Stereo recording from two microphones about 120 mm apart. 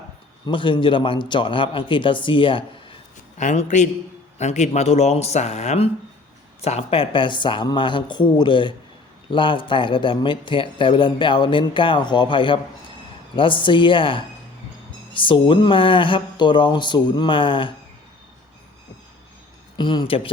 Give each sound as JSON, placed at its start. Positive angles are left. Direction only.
{"t": 0.4, "sound": "speech", "side_deg": 45}
{"t": 3.3, "sound": "a man's voice", "side_deg": 80}
{"t": 4.4, "sound": "speech", "side_deg": 70}
{"t": 19.7, "sound": "speech", "side_deg": 40}